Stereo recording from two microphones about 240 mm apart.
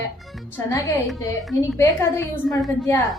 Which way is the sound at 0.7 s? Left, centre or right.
Centre.